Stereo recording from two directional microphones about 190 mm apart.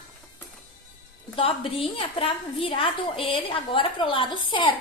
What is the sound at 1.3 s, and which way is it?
A woman's voice, 30° left (ahead or behind).